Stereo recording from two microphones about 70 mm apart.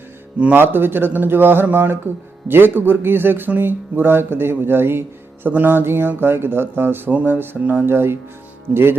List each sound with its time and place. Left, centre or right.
0.5 s speech: right
5.5 s speech: right
7.1 s speech: right
7.9 s speech: right